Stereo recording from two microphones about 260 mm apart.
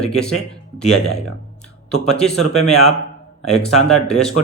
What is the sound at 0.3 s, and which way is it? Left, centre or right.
Speech, left.